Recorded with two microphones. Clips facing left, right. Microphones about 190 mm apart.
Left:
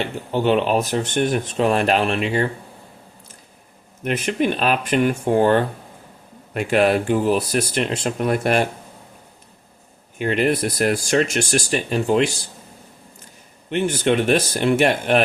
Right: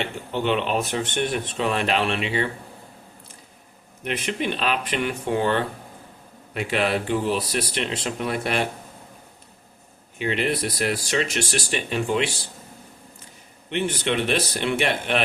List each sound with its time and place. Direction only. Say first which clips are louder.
0.3 s speech: left 5 dB; 40° left (ahead or behind)
4.0 s speech: left 6 dB; 45° left (ahead or behind)
10.2 s speech: left 5 dB; 45° left (ahead or behind)
13.7 s speech: left 5 dB; 45° left (ahead or behind)